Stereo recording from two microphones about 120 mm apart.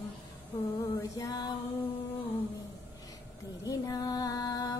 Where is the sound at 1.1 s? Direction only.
30° left (ahead or behind).